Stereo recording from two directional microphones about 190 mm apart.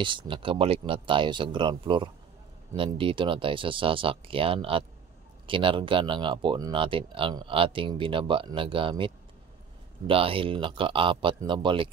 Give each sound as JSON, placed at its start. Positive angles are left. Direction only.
{"t": 0.0, "sound": "speech", "side_deg": -25}